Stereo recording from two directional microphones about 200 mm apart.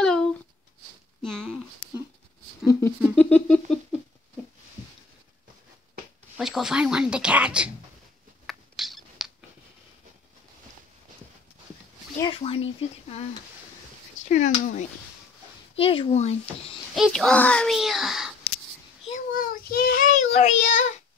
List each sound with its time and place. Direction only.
0.0 s a sound: 5° left (ahead or behind)
2.6 s speech: 15° left (ahead or behind)
6.3 s speech: centre (ahead or behind)
8.5 s mouse: centre (ahead or behind)
12.2 s speech: 25° left (ahead or behind)
14.3 s speech: 40° left (ahead or behind)
16.9 s speech: centre (ahead or behind)
19.0 s a child's voice: 40° left (ahead or behind)